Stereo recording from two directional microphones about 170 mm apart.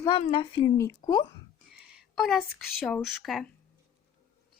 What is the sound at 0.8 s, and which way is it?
Speech, 15° left (ahead or behind).